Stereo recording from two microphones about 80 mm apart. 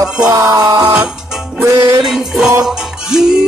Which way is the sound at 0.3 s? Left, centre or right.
Right.